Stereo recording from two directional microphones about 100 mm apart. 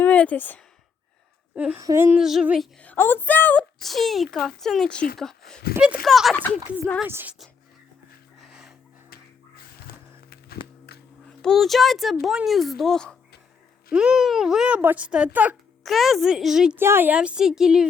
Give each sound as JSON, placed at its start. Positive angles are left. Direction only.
{"t": 0.0, "sound": "speech", "side_deg": 15}
{"t": 1.5, "sound": "speech", "side_deg": -15}
{"t": 1.8, "sound": "a woman's voice", "side_deg": -30}
{"t": 2.1, "sound": "speech", "side_deg": -5}
{"t": 3.0, "sound": "a woman's voice", "side_deg": 20}
{"t": 3.8, "sound": "speech", "side_deg": 0}
{"t": 7.1, "sound": "a woman's voice", "side_deg": -20}
{"t": 8.4, "sound": "music", "side_deg": -5}
{"t": 11.3, "sound": "speech", "side_deg": 5}
{"t": 13.9, "sound": "speech", "side_deg": -10}
{"t": 15.8, "sound": "speech", "side_deg": 0}
{"t": 16.7, "sound": "a woman's voice", "side_deg": -20}
{"t": 17.2, "sound": "speech", "side_deg": -10}